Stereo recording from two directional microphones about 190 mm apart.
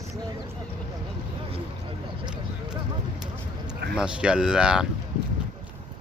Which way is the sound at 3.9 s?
5° right (ahead or behind).